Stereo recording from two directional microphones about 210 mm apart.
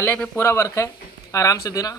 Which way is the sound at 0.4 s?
15° left (ahead or behind).